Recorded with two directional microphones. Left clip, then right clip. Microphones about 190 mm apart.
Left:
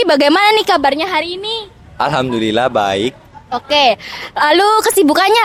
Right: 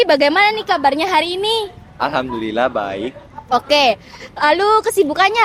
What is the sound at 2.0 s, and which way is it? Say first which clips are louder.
Speech: left 4 dB; 70° left (ahead or behind).